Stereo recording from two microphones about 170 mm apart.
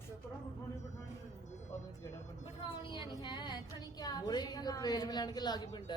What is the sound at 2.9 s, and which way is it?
A woman's voice, 25° left (ahead or behind).